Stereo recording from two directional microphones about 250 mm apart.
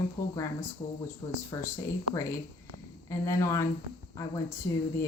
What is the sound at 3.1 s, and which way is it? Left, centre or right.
Speech, centre.